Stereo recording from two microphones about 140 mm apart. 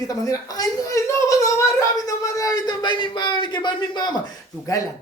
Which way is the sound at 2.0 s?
25° left (ahead or behind).